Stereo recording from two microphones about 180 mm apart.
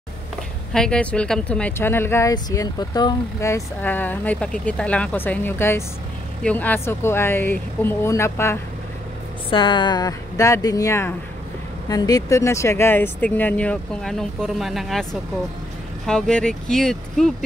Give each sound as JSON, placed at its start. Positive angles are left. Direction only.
{"t": 0.7, "sound": "speech", "side_deg": 5}
{"t": 9.5, "sound": "speech", "side_deg": 25}
{"t": 16.1, "sound": "speech", "side_deg": 5}